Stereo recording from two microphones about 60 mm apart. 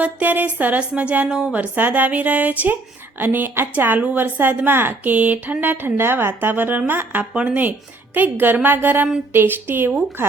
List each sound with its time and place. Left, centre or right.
0.0 s a woman's voice: right; by 1.6 s centre
1.6 s a woman's voice: right